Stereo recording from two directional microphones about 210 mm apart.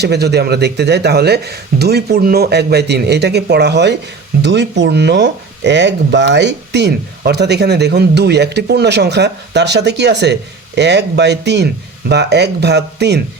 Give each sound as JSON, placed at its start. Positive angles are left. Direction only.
{"t": 0.0, "sound": "speech", "side_deg": -50}